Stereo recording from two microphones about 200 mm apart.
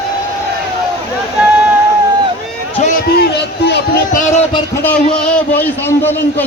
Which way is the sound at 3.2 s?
55° left (ahead or behind).